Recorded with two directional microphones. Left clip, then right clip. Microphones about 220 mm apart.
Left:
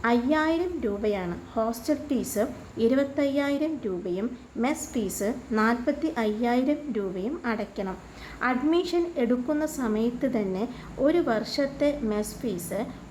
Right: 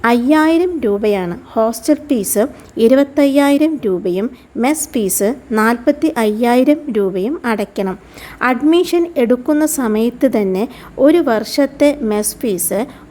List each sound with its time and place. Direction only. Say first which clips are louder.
0.0 s a woman's voice: right 12 dB; 40° right (ahead or behind)